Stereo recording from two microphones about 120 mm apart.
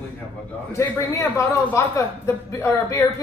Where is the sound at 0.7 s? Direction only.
25° left (ahead or behind).